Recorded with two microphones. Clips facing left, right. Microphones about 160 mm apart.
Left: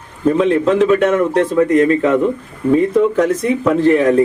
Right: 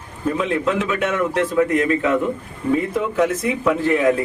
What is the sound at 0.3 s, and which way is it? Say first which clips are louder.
A man's voice: left 8 dB; 35° left (ahead or behind).